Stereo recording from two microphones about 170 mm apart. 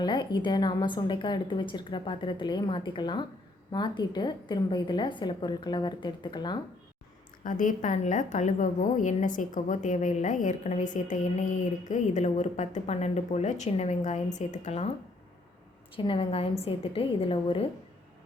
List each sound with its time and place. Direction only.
0.0 s a woman's voice: 25° left (ahead or behind)
7.4 s a woman's voice: 50° left (ahead or behind)
16.0 s a woman's voice: 35° left (ahead or behind)